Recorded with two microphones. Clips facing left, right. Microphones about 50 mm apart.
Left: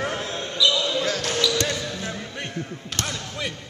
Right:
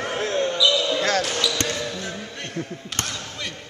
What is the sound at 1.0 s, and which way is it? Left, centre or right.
Basketball bounce, right.